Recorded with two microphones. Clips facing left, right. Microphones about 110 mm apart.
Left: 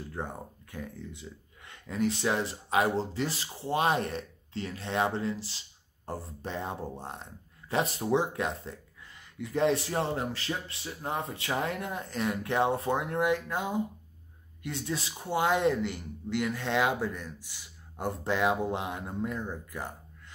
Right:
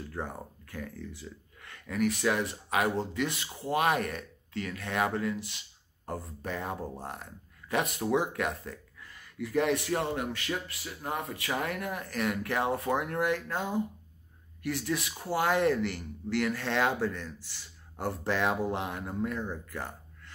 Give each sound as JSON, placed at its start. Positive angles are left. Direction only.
{"t": 0.1, "sound": "speech", "side_deg": 20}